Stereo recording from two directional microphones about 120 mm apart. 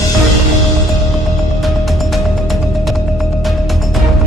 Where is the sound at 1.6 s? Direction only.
Centre (ahead or behind).